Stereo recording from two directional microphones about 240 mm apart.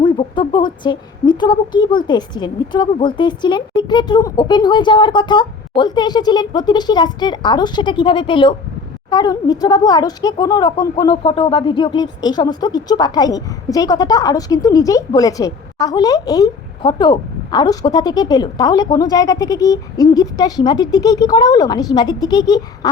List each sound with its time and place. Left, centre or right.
0.0 s speech: centre